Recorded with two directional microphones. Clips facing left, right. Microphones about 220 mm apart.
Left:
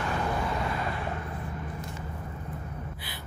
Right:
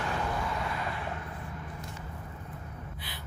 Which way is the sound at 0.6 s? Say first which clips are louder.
Left 3 dB; 40° left (ahead or behind).